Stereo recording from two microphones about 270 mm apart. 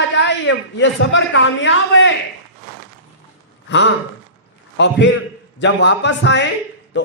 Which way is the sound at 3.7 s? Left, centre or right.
Left.